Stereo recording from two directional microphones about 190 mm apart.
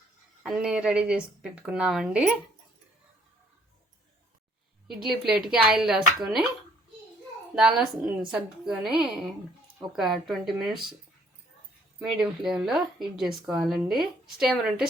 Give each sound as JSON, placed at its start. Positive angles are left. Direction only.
{"t": 0.4, "sound": "a woman's voice", "side_deg": -5}
{"t": 4.9, "sound": "a woman's voice", "side_deg": 0}
{"t": 7.5, "sound": "a woman's voice", "side_deg": -5}
{"t": 11.9, "sound": "a woman's voice", "side_deg": -5}